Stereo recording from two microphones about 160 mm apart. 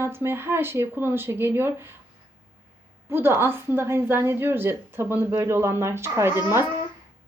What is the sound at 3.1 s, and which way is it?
Speech, 15° right (ahead or behind).